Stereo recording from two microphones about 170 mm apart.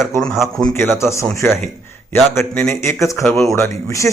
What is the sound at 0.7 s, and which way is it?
A man's voice, 10° left (ahead or behind).